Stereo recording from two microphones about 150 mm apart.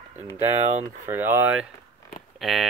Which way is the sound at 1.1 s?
15° right (ahead or behind).